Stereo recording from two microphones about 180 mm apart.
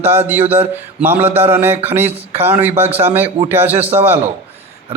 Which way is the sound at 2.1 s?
35° right (ahead or behind).